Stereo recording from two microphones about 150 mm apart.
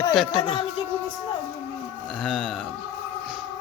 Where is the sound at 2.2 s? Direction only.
5° right (ahead or behind).